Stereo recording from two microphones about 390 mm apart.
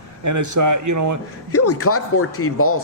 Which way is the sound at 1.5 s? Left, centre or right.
Left.